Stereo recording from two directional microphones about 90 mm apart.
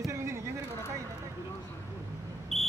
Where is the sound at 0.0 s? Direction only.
30° right (ahead or behind).